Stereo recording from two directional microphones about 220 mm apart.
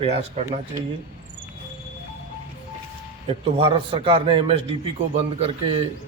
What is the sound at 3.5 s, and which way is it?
A man's voice, 25° right (ahead or behind).